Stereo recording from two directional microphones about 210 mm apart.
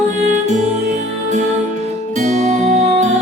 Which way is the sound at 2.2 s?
35° right (ahead or behind).